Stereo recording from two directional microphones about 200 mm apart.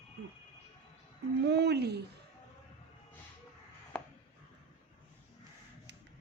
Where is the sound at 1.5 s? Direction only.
55° right (ahead or behind).